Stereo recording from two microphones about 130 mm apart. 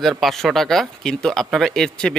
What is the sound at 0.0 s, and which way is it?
Speech, centre (ahead or behind).